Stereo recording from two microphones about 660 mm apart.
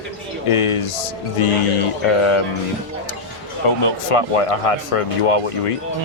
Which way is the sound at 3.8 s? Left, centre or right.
Left.